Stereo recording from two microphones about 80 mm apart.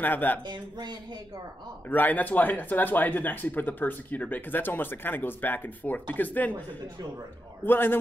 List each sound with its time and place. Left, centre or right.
0.0 s speech: left
0.5 s speech: right
1.9 s speech: left
7.6 s speech: left